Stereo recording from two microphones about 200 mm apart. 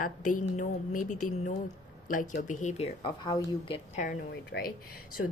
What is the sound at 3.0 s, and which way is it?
Speech, 20° left (ahead or behind).